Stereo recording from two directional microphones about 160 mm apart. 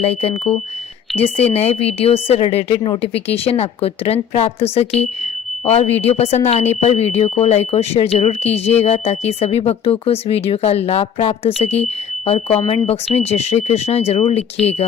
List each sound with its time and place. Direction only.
0.0 s speech: 40° left (ahead or behind)